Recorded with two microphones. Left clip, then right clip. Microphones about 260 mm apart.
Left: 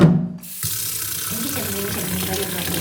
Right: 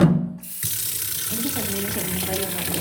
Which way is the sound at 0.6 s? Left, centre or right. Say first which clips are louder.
Left 2 dB; centre.